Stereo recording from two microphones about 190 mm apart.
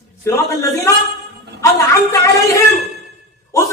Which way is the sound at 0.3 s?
15° left (ahead or behind).